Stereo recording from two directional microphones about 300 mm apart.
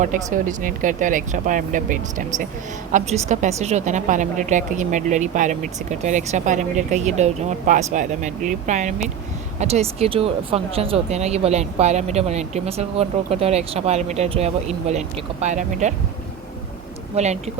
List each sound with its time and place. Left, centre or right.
0.0 s speech: right
17.2 s speech: right